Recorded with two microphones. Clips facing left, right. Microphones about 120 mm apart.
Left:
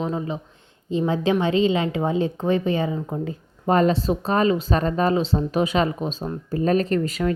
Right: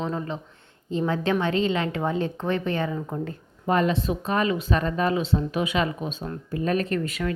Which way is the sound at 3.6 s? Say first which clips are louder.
Left 4 dB; 35° left (ahead or behind).